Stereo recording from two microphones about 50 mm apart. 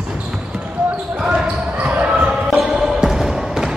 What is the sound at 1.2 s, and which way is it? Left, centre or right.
Basketball bounce, right.